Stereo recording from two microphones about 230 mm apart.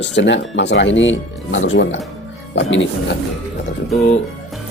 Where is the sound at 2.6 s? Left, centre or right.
Left.